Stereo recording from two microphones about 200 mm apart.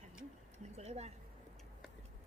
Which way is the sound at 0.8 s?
35° right (ahead or behind).